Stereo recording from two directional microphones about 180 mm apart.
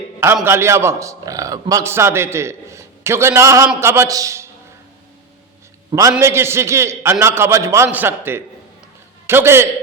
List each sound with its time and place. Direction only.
0.4 s a man's voice: 15° right (ahead or behind)
5.9 s a man's voice: 20° right (ahead or behind)